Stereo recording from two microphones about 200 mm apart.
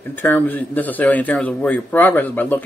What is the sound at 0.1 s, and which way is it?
Speech, 10° left (ahead or behind).